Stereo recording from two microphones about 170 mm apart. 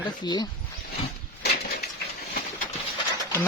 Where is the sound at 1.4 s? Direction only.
70° left (ahead or behind).